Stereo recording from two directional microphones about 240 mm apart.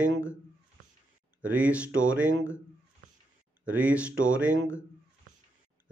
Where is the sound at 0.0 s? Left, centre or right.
Centre.